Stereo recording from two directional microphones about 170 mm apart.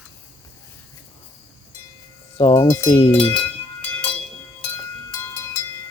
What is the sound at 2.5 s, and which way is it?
Cowbell, 15° left (ahead or behind).